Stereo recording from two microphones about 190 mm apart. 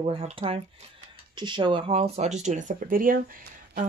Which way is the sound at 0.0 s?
30° right (ahead or behind).